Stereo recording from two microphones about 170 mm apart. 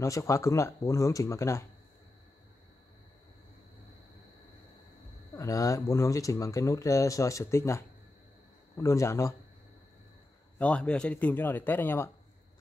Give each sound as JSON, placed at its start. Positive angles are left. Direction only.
{"t": 0.0, "sound": "speech", "side_deg": 20}
{"t": 5.3, "sound": "speech", "side_deg": 20}
{"t": 10.6, "sound": "speech", "side_deg": 5}